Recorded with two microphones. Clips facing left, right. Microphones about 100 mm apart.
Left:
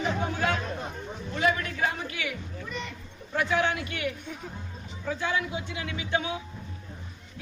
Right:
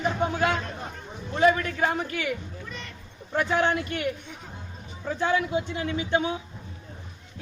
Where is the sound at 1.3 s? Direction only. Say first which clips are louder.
Right 5 dB; 40° right (ahead or behind).